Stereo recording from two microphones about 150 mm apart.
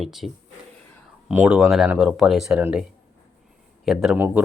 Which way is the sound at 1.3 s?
5° right (ahead or behind).